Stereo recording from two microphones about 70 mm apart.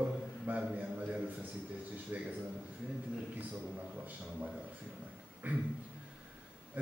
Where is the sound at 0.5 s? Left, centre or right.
Right.